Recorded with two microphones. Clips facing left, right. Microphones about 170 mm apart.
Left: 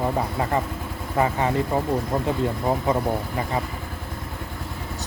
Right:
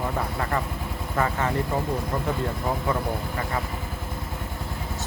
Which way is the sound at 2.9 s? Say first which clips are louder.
Left 4 dB; 20° left (ahead or behind).